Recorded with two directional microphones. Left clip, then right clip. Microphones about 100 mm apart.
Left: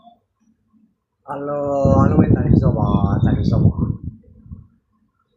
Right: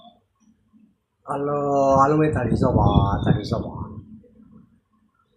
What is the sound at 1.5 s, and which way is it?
Speech, 25° right (ahead or behind).